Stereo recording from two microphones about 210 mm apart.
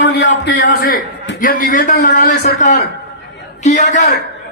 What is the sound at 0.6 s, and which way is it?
A man's voice, 40° left (ahead or behind).